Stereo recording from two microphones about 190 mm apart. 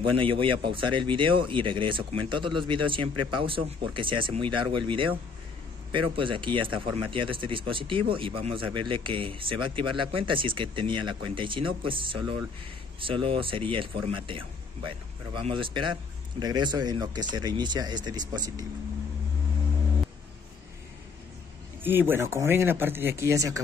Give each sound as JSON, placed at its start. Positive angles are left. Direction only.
{"t": 0.0, "sound": "a man's voice", "side_deg": -25}
{"t": 21.8, "sound": "speech", "side_deg": -10}